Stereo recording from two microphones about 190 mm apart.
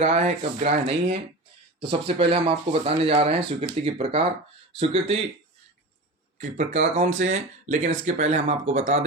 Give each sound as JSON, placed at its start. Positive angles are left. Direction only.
{"t": 0.0, "sound": "speech", "side_deg": -35}
{"t": 6.4, "sound": "speech", "side_deg": -40}